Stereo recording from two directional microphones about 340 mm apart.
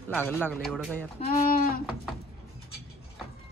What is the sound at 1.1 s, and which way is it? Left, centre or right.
Speech, left.